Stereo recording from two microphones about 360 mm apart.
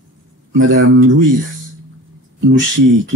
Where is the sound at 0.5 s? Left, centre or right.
Right.